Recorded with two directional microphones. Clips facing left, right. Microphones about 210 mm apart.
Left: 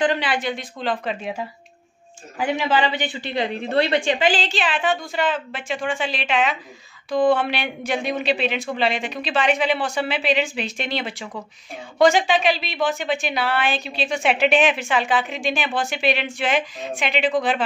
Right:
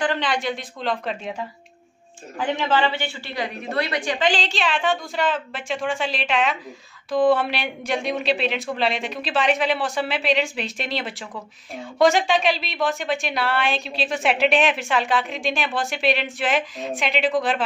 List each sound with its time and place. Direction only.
0.2 s a woman's voice: 5° left (ahead or behind); by 4.2 s 25° left (ahead or behind)
4.2 s a woman's voice: centre (ahead or behind)